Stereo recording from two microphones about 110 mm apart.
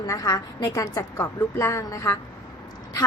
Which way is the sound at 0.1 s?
35° left (ahead or behind).